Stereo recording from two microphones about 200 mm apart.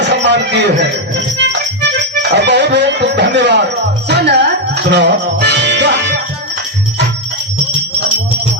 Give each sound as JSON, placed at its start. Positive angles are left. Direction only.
{"t": 0.0, "sound": "music", "side_deg": -60}